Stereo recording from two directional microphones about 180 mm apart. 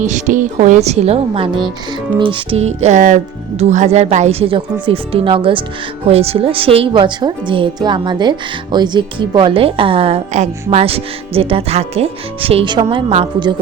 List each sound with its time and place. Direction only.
0.0 s a woman's voice: 45° right (ahead or behind)